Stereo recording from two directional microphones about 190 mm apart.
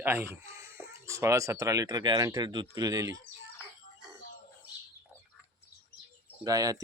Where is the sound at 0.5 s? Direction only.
15° right (ahead or behind).